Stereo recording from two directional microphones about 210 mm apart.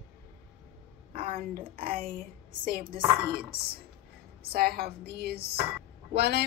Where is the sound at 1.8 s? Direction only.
40° right (ahead or behind).